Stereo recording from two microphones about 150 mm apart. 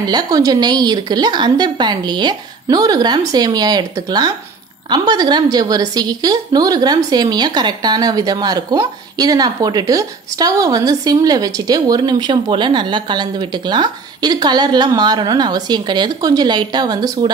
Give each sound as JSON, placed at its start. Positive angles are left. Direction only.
{"t": 0.0, "sound": "a woman's voice", "side_deg": -25}